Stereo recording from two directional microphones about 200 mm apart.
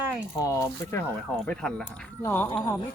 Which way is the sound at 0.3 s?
15° left (ahead or behind).